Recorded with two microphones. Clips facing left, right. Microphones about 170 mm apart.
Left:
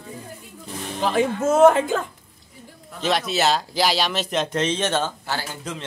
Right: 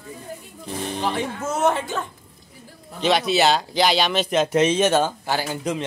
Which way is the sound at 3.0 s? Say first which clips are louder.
Right 3 dB; centre (ahead or behind).